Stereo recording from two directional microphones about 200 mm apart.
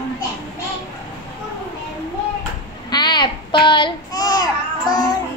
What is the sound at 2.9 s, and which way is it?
Child singing, 20° left (ahead or behind).